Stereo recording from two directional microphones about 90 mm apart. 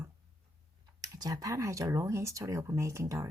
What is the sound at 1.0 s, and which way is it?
Speech, 40° right (ahead or behind).